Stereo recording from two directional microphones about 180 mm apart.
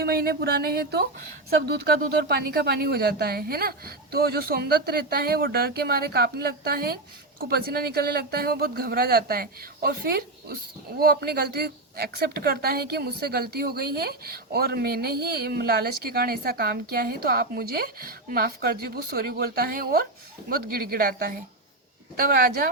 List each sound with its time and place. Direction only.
0.0 s speech: 60° right (ahead or behind)